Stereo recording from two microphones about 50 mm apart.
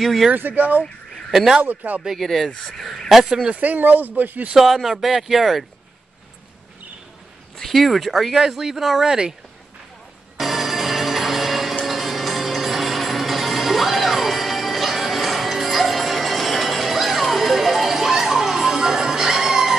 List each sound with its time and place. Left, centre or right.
0.0 s speech: centre
0.3 s speech: right
1.3 s speech: centre
1.6 s speech: right
2.2 s speech: centre
3.5 s speech: right
4.6 s speech: centre
7.5 s speech: centre
10.3 s music: centre